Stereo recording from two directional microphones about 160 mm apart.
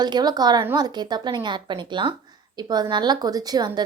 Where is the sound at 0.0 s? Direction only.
25° right (ahead or behind).